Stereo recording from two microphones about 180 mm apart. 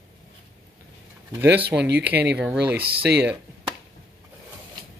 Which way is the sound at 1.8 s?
65° right (ahead or behind).